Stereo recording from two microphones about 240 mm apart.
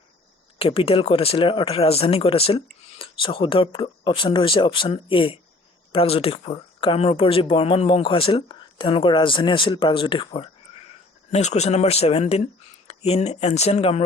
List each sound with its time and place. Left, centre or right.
0.6 s speech: left